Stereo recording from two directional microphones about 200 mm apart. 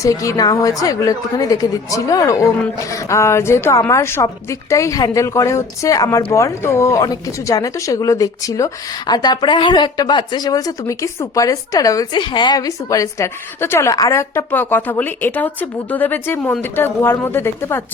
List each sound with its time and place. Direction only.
0.0 s a woman's voice: 15° left (ahead or behind)